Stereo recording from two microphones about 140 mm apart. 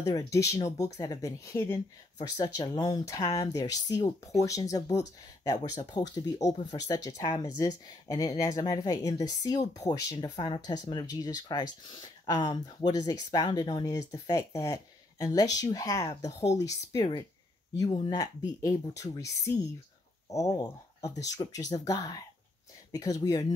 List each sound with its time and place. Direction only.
0.0 s speech: 25° left (ahead or behind)